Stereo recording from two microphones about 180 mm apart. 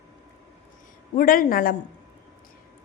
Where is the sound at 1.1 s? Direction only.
50° left (ahead or behind).